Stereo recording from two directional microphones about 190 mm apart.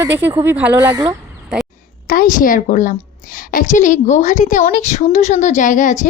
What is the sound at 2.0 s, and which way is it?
A woman's voice, 50° left (ahead or behind).